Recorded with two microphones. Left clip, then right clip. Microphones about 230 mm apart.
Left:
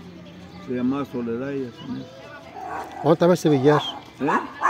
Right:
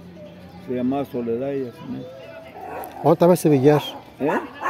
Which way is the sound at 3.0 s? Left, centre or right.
Centre.